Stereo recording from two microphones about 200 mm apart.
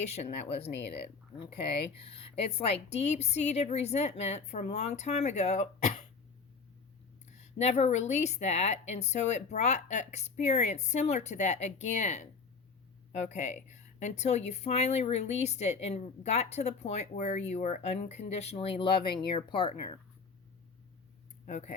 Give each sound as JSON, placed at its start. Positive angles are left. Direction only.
{"t": 0.0, "sound": "speech", "side_deg": 30}
{"t": 2.0, "sound": "speech", "side_deg": 30}
{"t": 7.3, "sound": "speech", "side_deg": 35}
{"t": 21.4, "sound": "speech", "side_deg": 35}